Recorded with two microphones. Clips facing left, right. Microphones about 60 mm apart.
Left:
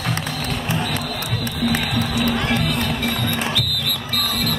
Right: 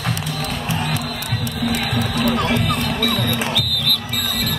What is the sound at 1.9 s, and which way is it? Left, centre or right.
Music, centre.